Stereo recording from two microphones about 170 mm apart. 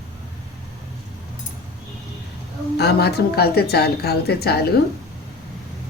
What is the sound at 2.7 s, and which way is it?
A woman's voice, 70° left (ahead or behind).